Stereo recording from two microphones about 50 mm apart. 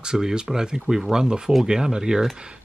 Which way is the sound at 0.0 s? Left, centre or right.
Centre.